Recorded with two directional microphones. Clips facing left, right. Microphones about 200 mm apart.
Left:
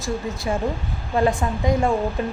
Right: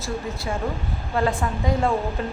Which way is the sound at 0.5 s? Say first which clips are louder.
Left 4 dB; 20° left (ahead or behind).